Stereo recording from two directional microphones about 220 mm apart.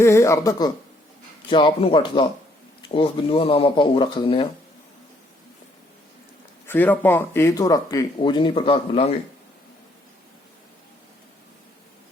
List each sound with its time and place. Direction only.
0.0 s speech: 15° left (ahead or behind)
6.7 s speech: 10° left (ahead or behind); by 9.1 s 25° left (ahead or behind)